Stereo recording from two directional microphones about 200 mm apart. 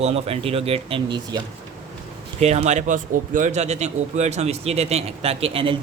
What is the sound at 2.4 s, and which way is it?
Speech, 30° right (ahead or behind).